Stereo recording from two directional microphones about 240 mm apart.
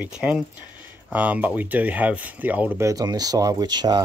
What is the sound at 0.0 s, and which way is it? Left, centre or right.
Speech, centre.